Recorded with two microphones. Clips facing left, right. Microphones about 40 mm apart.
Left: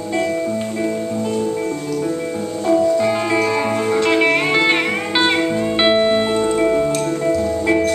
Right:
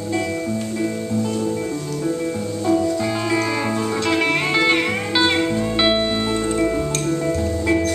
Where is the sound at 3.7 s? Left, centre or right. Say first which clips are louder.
Left 4 dB; left.